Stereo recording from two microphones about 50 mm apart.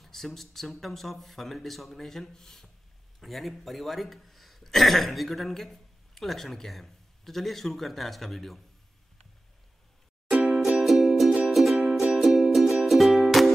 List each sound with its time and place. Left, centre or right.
0.0 s speech: centre
10.3 s music: centre
10.6 s music: centre